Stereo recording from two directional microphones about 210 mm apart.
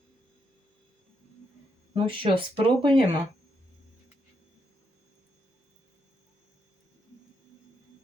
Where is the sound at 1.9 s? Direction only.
25° right (ahead or behind).